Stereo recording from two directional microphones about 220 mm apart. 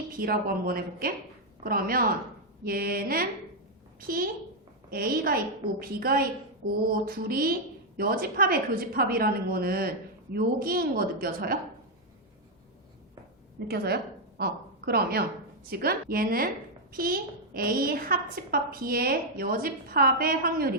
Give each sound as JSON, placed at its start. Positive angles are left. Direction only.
{"t": 0.2, "sound": "a woman's voice", "side_deg": -40}
{"t": 13.7, "sound": "a woman's voice", "side_deg": -45}